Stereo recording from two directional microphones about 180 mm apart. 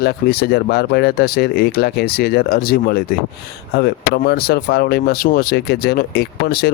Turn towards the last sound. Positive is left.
turn(degrees=60)  # may be behind; listen again after turning